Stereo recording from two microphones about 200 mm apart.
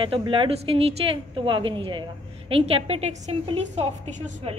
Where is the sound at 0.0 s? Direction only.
25° right (ahead or behind).